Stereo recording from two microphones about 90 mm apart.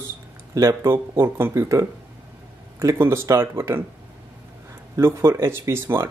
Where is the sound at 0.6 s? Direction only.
35° right (ahead or behind).